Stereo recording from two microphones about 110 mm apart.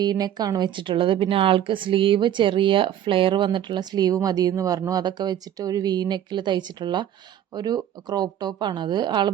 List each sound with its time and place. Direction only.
0.0 s a woman's voice: 40° right (ahead or behind)